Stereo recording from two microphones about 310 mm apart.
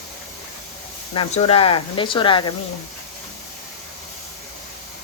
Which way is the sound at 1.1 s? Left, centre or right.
Centre.